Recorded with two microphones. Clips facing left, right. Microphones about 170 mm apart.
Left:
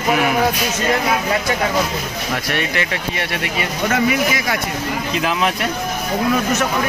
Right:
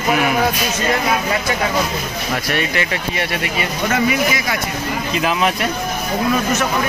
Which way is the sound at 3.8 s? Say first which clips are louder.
Even; 50° left (ahead or behind).